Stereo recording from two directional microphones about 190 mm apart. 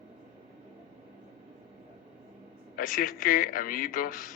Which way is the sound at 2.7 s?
45° left (ahead or behind).